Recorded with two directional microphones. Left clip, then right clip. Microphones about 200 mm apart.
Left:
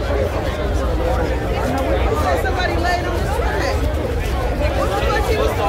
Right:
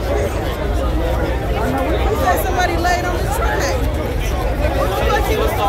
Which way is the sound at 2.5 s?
50° right (ahead or behind).